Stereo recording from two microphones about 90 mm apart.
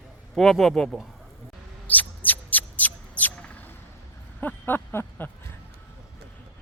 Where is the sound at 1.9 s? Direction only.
20° left (ahead or behind).